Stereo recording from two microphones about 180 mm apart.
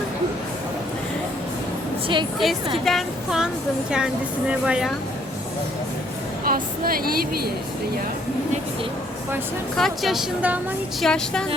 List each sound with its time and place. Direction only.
2.4 s speech: centre (ahead or behind)
6.4 s a woman's voice: 55° right (ahead or behind)
9.7 s speech: centre (ahead or behind)